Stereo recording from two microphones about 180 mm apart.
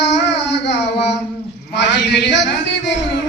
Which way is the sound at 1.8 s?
70° left (ahead or behind).